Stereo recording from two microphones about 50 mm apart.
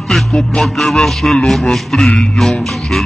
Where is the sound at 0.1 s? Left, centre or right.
Centre.